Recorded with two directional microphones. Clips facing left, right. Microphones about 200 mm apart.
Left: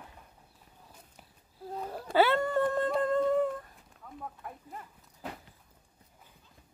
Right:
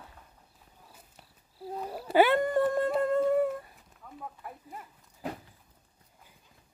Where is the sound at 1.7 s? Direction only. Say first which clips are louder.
Right 2 dB; 5° right (ahead or behind).